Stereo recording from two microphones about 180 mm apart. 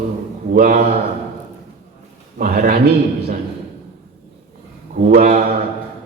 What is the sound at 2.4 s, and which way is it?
Speech, 50° right (ahead or behind).